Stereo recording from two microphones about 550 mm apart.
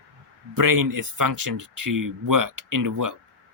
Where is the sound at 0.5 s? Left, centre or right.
Right.